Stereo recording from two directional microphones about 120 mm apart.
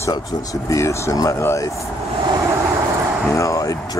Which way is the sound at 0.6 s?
25° left (ahead or behind).